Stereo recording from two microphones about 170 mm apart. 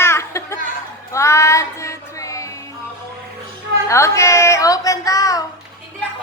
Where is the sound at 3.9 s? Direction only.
15° left (ahead or behind).